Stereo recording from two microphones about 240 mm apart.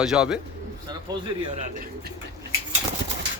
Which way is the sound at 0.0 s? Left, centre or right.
Centre.